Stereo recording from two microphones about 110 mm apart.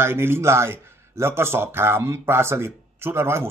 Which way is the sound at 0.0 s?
20° right (ahead or behind).